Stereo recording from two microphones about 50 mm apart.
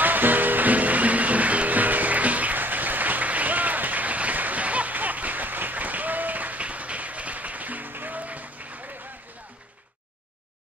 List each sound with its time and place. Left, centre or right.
0.0 s music: right